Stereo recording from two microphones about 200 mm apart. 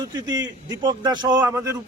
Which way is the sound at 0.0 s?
20° right (ahead or behind).